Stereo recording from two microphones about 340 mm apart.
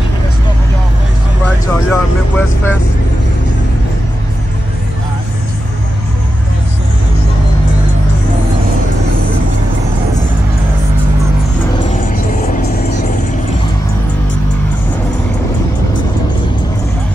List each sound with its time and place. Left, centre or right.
1.4 s vehicle: centre